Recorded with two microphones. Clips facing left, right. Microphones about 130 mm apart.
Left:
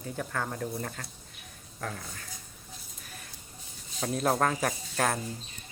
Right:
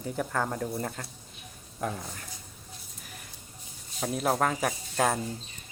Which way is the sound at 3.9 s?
5° right (ahead or behind).